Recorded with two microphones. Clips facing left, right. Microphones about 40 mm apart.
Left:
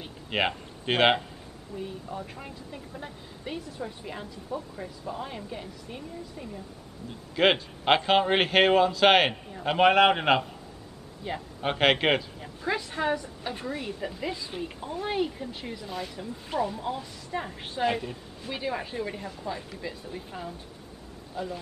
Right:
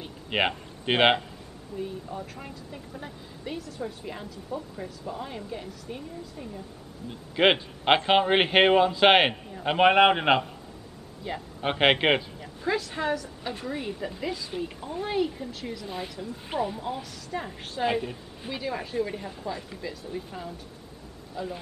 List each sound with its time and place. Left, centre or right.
0.3 s speech: centre
1.8 s speech: centre
7.3 s a man's voice: centre
11.3 s speech: centre
11.6 s a man's voice: centre
12.4 s speech: centre
13.7 s speech: centre
16.4 s a man's voice: centre
17.3 s speech: centre
17.8 s a man's voice: centre
18.5 s speech: centre